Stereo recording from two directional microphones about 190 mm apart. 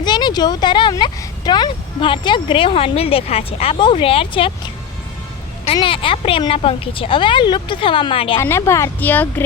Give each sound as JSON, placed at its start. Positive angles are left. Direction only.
{"t": 0.0, "sound": "speech", "side_deg": 25}
{"t": 8.4, "sound": "speech", "side_deg": 15}